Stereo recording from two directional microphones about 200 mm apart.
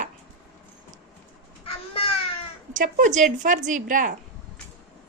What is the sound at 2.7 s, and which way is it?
A woman's voice, 40° right (ahead or behind).